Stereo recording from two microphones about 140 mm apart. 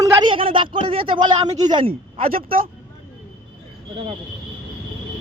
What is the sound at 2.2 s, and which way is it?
Speech, 90° right.